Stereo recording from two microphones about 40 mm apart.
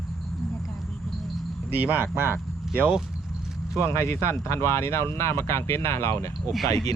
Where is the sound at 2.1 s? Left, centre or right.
Right.